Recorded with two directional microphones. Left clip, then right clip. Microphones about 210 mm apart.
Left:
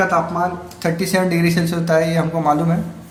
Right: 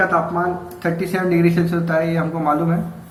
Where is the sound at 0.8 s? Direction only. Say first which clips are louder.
Left 5 dB; 60° left (ahead or behind).